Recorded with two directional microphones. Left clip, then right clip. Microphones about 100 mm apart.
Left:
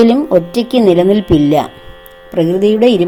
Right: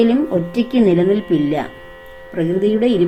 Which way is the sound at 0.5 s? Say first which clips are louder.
Left 5 dB; 90° left.